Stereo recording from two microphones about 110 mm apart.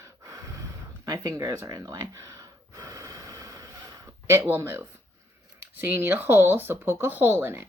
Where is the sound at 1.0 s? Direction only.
35° right (ahead or behind).